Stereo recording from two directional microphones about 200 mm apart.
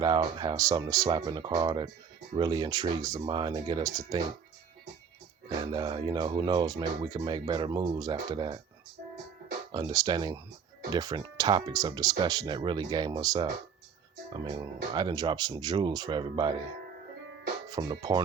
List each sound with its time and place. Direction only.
0.0 s speech: 20° right (ahead or behind)
5.5 s speech: 20° right (ahead or behind)
9.7 s speech: 20° right (ahead or behind)
17.7 s speech: 20° right (ahead or behind)